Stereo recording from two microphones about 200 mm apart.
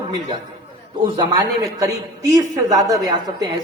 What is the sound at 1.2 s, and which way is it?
A woman's voice, 20° right (ahead or behind).